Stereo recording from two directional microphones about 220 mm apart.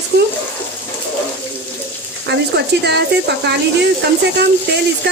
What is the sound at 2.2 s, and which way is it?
Speech, 50° right (ahead or behind).